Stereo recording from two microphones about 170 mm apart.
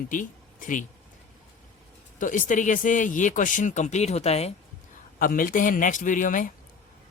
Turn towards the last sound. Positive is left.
turn(degrees=50)  # may be behind; listen again after turning